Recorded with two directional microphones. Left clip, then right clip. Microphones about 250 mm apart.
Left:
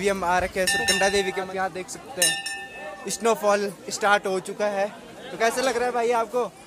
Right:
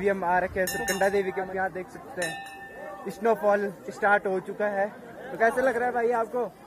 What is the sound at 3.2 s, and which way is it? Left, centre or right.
A man's voice, left.